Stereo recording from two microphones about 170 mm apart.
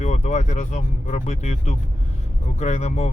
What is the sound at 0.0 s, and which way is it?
Speech, 45° left (ahead or behind).